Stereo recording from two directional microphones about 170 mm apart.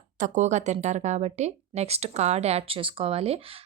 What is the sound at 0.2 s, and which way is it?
Speech, 45° right (ahead or behind).